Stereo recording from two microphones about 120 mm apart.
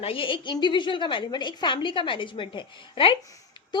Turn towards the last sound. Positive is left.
turn(degrees=45)  # may be behind; listen again after turning